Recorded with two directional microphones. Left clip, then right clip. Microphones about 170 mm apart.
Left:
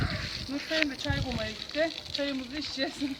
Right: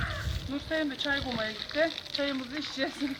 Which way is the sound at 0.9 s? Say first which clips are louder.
Right 3 dB; 5° left (ahead or behind).